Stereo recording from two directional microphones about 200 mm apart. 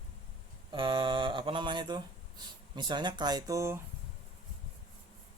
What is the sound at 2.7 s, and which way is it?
Speech, 20° right (ahead or behind).